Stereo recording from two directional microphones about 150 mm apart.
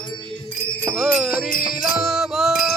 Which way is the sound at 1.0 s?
5° right (ahead or behind).